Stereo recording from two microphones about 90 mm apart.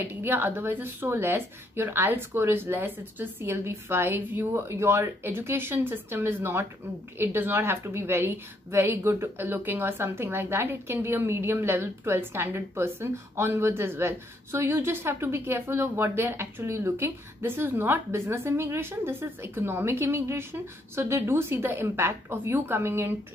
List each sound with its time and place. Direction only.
0.0 s a woman's voice: 25° right (ahead or behind)